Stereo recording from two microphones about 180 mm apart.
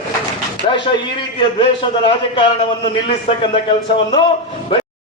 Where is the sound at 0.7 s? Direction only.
25° left (ahead or behind).